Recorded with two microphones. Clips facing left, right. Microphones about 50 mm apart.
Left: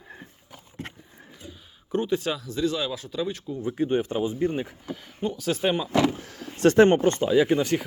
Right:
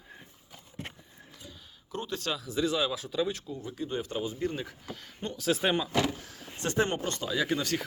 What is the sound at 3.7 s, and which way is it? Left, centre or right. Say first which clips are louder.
Speech: left 9 dB; left.